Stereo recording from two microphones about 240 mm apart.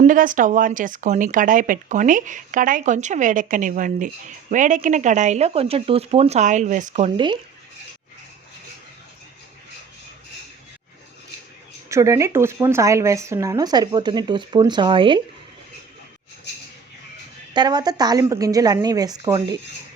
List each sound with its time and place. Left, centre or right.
0.0 s speech: right
11.9 s speech: centre
17.5 s speech: centre